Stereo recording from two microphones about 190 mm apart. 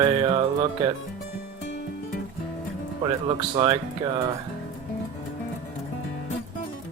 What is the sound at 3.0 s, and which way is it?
Speech, 25° right (ahead or behind).